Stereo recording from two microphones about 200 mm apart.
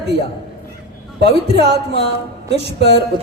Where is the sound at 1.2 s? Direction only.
55° right (ahead or behind).